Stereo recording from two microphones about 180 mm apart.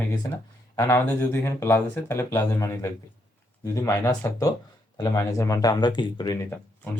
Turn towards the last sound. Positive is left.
turn(degrees=10)  # may be behind; listen again after turning